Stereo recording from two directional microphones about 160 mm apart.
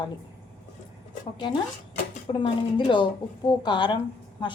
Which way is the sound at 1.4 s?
30° left (ahead or behind).